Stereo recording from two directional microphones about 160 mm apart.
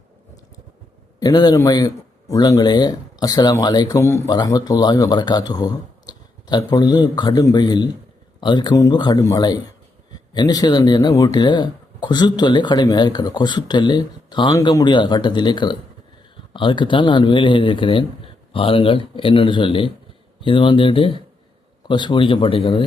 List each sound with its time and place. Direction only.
1.2 s speech: 25° left (ahead or behind)